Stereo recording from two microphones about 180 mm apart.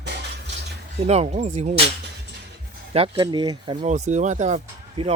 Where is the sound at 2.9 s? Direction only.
30° right (ahead or behind).